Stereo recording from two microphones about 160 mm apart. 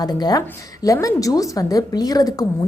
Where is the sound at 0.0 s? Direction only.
25° left (ahead or behind).